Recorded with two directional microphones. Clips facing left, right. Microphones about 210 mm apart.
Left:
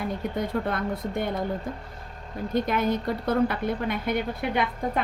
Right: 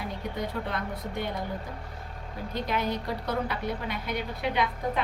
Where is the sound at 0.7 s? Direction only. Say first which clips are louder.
Left 5 dB; 50° left (ahead or behind).